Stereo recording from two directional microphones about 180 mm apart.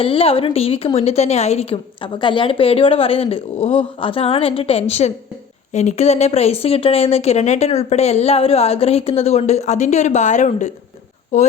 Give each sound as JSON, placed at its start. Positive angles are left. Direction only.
{"t": 0.0, "sound": "a woman's voice", "side_deg": 30}